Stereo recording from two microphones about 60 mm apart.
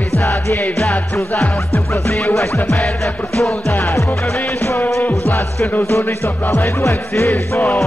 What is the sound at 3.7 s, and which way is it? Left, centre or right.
Music, left.